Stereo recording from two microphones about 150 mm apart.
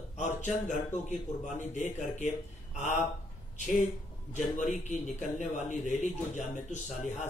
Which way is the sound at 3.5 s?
55° left (ahead or behind).